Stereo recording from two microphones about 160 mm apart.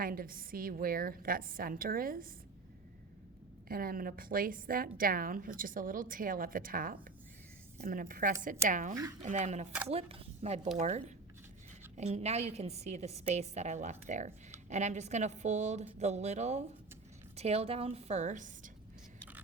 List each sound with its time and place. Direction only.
0.0 s a woman's voice: 65° right (ahead or behind)
3.7 s a woman's voice: 65° right (ahead or behind)